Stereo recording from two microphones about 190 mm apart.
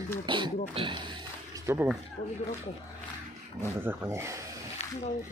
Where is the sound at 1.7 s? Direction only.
10° right (ahead or behind).